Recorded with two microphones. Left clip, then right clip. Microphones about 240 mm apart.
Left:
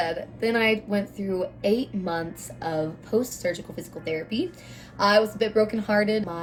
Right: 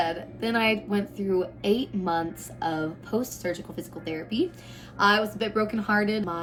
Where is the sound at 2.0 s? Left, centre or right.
Right.